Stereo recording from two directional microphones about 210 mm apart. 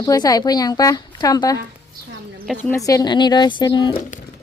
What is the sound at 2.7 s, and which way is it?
Speech, 15° left (ahead or behind).